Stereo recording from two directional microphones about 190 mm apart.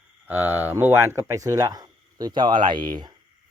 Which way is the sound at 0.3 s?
10° right (ahead or behind).